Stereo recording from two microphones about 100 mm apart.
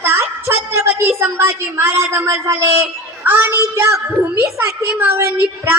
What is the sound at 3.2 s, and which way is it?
A woman's voice, 20° right (ahead or behind).